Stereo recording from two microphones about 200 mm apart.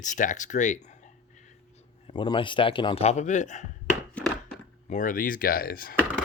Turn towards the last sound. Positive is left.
turn(degrees=45)  # may be behind; listen again after turning